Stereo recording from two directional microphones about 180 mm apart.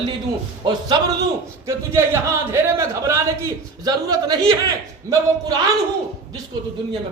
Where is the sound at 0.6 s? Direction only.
25° right (ahead or behind).